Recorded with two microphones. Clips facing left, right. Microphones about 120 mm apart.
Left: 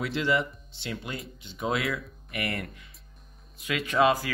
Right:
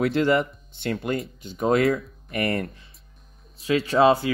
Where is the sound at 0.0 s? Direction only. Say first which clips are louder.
Right 7 dB; 50° right (ahead or behind).